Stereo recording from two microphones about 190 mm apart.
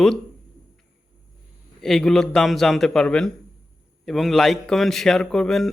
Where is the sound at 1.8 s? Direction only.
Centre (ahead or behind).